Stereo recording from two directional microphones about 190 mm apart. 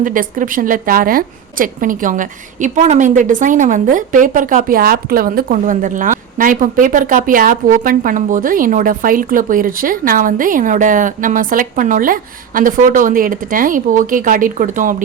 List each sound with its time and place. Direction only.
0.0 s a woman's voice: 45° right (ahead or behind)